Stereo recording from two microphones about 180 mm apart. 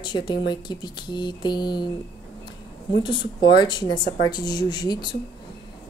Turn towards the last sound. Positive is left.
turn(degrees=25)  # may be behind; listen again after turning